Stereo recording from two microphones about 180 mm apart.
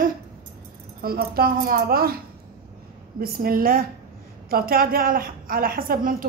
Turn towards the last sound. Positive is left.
turn(degrees=-55)  # may be behind; listen again after turning